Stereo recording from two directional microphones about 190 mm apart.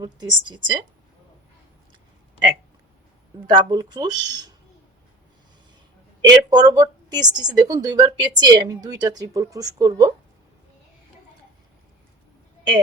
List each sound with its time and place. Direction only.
0.0 s speech: 20° right (ahead or behind)
3.5 s speech: 20° right (ahead or behind)
6.2 s speech: 20° right (ahead or behind)